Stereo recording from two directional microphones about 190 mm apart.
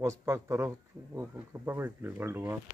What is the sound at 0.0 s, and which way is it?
Speech, 15° right (ahead or behind).